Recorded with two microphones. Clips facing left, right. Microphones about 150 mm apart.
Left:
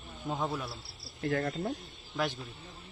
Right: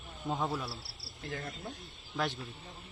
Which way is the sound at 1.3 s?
60° left (ahead or behind).